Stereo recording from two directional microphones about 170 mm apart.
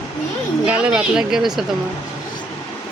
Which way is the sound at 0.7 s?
5° right (ahead or behind).